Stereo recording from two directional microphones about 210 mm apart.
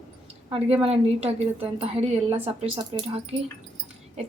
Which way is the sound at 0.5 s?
30° right (ahead or behind).